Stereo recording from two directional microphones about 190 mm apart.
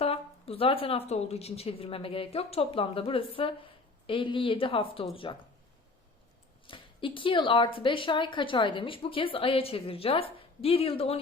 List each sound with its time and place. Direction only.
0.0 s a woman's voice: 30° left (ahead or behind)
6.7 s a woman's voice: 25° left (ahead or behind)